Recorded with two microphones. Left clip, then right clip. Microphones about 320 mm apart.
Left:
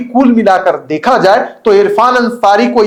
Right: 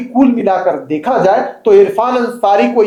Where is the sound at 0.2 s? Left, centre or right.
Centre.